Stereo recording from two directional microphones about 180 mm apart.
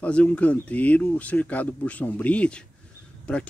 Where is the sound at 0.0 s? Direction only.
5° left (ahead or behind).